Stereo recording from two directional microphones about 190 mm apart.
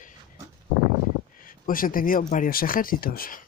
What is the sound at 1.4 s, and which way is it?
Speech, 45° left (ahead or behind).